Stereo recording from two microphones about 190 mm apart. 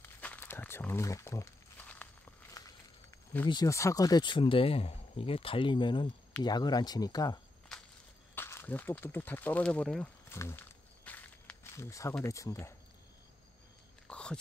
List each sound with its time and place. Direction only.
0.0 s crumpling: 10° left (ahead or behind)
3.4 s speech: 20° left (ahead or behind)
7.7 s walk: centre (ahead or behind)
8.4 s speech: 10° left (ahead or behind)
10.4 s walk: 10° left (ahead or behind)
14.0 s a sound: 5° left (ahead or behind)